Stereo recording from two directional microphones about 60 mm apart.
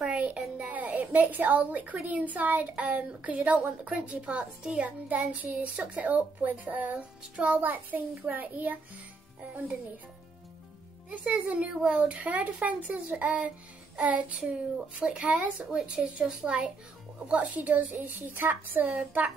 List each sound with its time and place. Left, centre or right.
0.0 s a sound: right
2.0 s speech: right
11.1 s speech: right
13.9 s child singing: right
15.0 s speech: right